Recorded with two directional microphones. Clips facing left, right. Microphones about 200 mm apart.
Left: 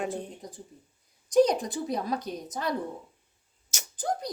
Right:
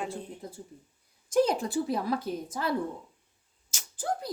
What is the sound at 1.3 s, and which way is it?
Speech, 20° left (ahead or behind).